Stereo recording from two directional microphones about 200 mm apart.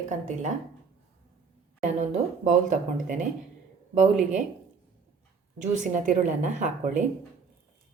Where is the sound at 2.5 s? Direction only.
40° right (ahead or behind).